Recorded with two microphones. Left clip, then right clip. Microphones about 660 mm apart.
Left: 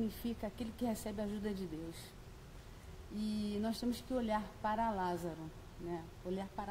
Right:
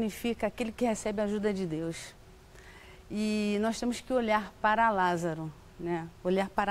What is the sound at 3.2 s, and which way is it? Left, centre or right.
A woman's voice, right.